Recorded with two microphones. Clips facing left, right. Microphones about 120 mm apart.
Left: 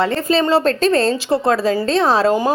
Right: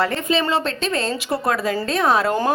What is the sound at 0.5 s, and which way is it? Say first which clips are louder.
A woman's voice: left 8 dB; 40° left (ahead or behind).